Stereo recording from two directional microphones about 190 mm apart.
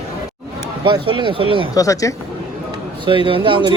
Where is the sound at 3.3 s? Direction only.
25° right (ahead or behind).